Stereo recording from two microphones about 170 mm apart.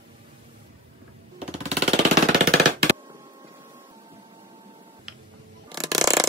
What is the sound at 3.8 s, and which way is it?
Vehicle, 30° right (ahead or behind).